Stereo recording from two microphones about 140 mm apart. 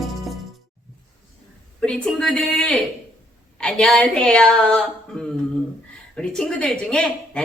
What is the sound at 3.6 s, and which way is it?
Speech, 5° left (ahead or behind).